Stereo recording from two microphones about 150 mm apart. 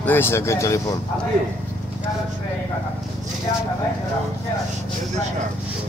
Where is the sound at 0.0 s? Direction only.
15° left (ahead or behind).